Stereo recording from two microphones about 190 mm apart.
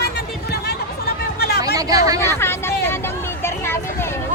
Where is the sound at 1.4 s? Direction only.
55° left (ahead or behind).